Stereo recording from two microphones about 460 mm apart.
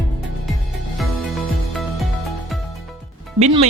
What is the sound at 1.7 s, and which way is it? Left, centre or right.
Music, centre.